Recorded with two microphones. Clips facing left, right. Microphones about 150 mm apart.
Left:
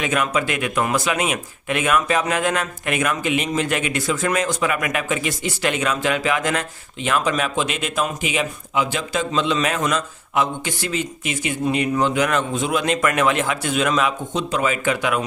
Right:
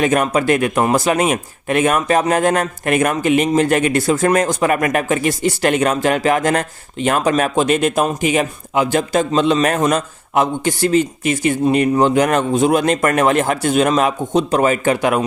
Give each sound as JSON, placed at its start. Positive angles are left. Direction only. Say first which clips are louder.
{"t": 0.0, "sound": "a man's voice", "louder": "right 6 dB", "side_deg": -45}